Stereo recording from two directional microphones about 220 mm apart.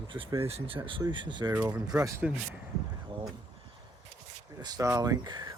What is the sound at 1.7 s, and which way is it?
Speech, 10° right (ahead or behind).